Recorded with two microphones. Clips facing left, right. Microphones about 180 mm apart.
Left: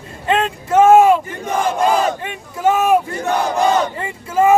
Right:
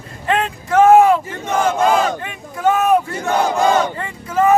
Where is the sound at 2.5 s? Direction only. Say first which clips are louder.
Even; 5° left (ahead or behind).